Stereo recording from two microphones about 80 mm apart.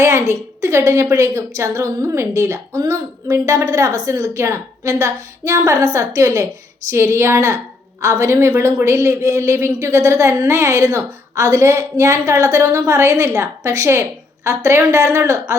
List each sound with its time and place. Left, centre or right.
0.0 s a woman's voice: right